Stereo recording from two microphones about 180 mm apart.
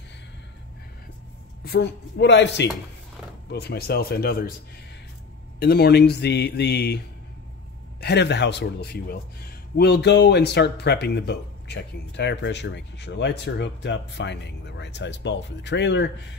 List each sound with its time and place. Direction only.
1.6 s speech: 60° left (ahead or behind)
3.4 s speech: 65° left (ahead or behind)
5.6 s speech: 60° left (ahead or behind)
8.0 s speech: 70° left (ahead or behind)